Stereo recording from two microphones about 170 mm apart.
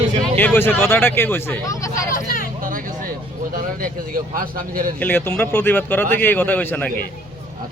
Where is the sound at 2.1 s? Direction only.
55° left (ahead or behind).